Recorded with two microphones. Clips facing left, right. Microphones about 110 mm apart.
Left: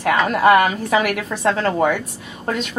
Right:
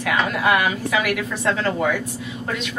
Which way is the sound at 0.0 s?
45° left (ahead or behind).